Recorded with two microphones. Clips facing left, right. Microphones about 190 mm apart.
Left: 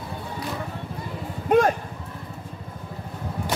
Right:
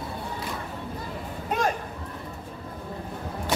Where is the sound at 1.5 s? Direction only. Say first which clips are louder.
Left 9 dB; 55° left (ahead or behind).